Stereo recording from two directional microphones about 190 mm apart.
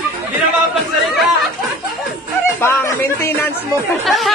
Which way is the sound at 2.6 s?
10° left (ahead or behind).